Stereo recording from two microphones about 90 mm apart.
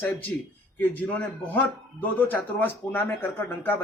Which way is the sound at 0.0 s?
20° left (ahead or behind).